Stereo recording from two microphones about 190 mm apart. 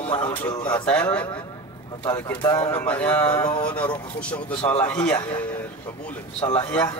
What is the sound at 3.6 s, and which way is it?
A man's voice, 5° left (ahead or behind).